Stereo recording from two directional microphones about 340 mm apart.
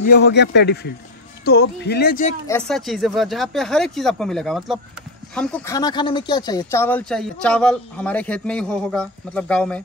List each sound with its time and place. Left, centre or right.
0.0 s speech: left
2.4 s speech: centre